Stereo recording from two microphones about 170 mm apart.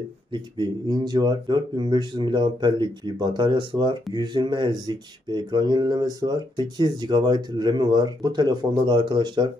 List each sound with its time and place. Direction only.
0.3 s speech: 25° right (ahead or behind)